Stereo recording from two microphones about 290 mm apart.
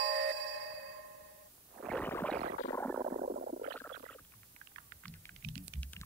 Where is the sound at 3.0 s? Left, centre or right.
Right.